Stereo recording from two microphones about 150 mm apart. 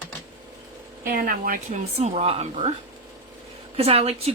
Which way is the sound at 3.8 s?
40° right (ahead or behind).